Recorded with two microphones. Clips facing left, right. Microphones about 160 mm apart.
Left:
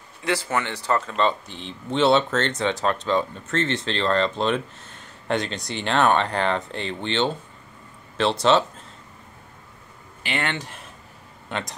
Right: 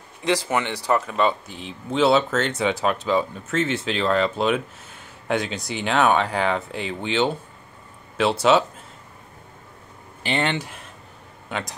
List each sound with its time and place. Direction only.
0.2 s speech: 15° right (ahead or behind)
10.2 s speech: 25° right (ahead or behind)
11.4 s speech: 5° right (ahead or behind)